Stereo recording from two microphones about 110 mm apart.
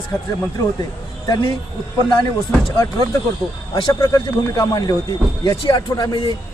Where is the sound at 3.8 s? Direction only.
40° left (ahead or behind).